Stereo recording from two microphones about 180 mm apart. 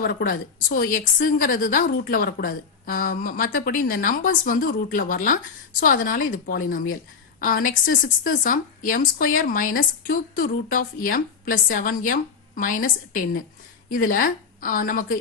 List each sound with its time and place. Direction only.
0.0 s a woman's voice: 55° left (ahead or behind)